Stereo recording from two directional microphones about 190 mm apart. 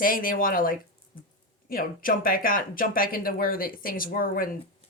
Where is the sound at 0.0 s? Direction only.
45° left (ahead or behind).